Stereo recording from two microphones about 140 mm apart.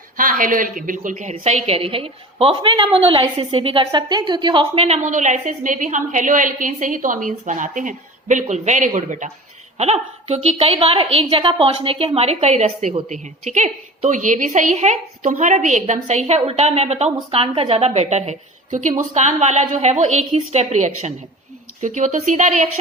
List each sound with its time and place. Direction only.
0.2 s a woman's voice: 75° right (ahead or behind); by 22.7 s 60° right (ahead or behind)